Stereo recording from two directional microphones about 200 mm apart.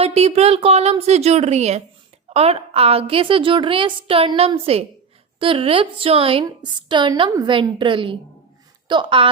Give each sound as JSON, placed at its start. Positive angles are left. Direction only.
{"t": 0.0, "sound": "a woman's voice", "side_deg": -30}